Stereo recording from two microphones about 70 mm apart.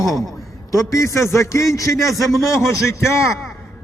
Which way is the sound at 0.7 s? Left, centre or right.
Left.